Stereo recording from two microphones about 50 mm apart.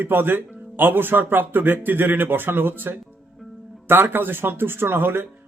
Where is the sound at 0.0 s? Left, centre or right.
Right.